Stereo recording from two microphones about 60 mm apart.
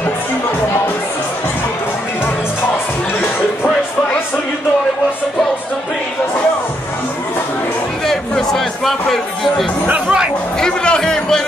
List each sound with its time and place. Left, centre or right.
8.1 s music: centre
9.8 s music: right
10.6 s a sound: centre